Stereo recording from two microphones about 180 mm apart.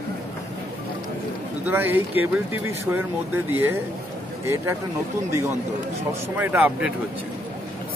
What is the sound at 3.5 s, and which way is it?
Speech, 15° right (ahead or behind).